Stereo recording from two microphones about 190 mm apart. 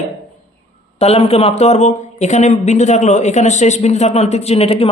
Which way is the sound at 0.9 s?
35° left (ahead or behind).